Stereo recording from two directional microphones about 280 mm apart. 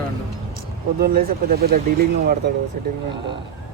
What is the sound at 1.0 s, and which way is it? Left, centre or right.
Speech, right.